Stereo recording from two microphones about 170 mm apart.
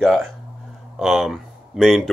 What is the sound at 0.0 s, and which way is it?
Speech, 5° left (ahead or behind).